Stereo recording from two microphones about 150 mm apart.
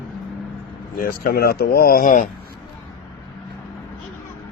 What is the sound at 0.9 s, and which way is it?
Speech, 75° left (ahead or behind).